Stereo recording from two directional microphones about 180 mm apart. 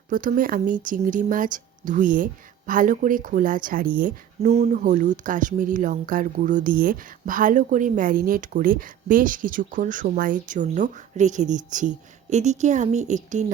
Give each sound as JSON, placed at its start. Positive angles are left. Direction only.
{"t": 0.1, "sound": "speech", "side_deg": -50}